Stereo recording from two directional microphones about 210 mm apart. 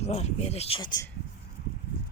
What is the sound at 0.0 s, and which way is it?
Speech, 30° left (ahead or behind).